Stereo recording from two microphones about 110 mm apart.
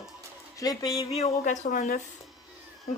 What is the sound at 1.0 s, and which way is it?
Speech, 70° left (ahead or behind).